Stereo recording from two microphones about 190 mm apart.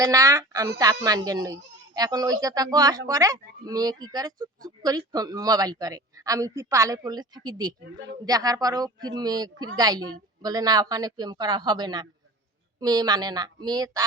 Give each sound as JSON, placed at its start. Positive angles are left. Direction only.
{"t": 0.0, "sound": "a woman's voice", "side_deg": -15}